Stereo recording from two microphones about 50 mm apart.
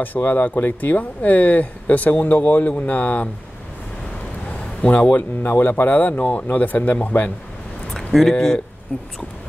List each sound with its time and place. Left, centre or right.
0.0 s speech: left
4.8 s speech: left
7.9 s speech: centre